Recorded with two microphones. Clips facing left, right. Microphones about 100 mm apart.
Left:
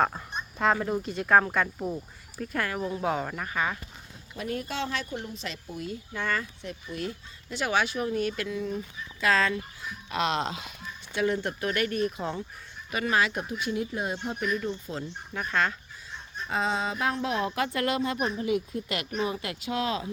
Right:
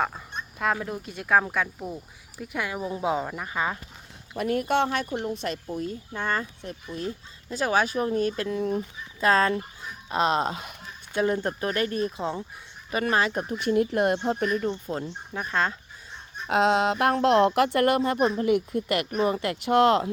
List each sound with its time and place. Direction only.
0.6 s speech: centre (ahead or behind)
2.4 s speech: 10° right (ahead or behind)
3.5 s speech: 25° right (ahead or behind)
4.4 s speech: 55° right (ahead or behind)
14.3 s speech: 40° right (ahead or behind)
15.3 s speech: 25° right (ahead or behind)
16.5 s speech: 75° right (ahead or behind)